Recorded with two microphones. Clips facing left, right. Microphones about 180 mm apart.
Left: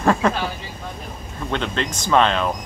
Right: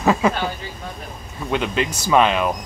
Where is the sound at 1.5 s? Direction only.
10° right (ahead or behind).